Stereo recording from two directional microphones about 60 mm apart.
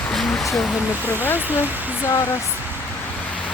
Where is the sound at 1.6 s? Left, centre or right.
Right.